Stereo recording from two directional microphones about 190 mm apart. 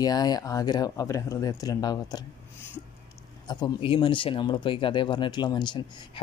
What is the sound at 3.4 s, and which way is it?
Speech, 25° left (ahead or behind).